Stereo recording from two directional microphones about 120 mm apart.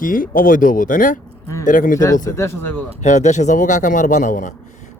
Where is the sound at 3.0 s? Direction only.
80° left.